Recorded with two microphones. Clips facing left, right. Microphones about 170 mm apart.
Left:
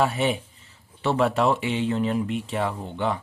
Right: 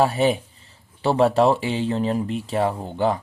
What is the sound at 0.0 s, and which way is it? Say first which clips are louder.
Speech: right 4 dB; 35° right (ahead or behind).